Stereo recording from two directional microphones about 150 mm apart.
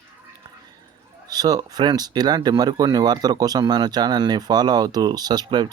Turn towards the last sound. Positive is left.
turn(degrees=-30)  # may be behind; listen again after turning